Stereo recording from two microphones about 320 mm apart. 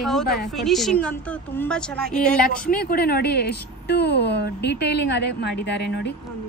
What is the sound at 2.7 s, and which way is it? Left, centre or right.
A woman's voice, left.